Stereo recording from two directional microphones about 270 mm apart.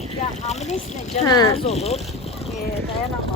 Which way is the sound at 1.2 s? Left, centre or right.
Centre.